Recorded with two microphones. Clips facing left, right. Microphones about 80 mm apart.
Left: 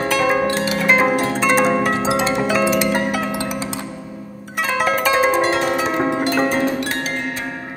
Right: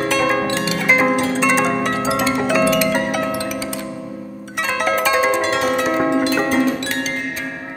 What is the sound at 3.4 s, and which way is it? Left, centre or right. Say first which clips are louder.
Music: even; left.